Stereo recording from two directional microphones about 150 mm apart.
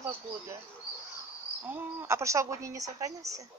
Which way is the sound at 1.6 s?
15° right (ahead or behind).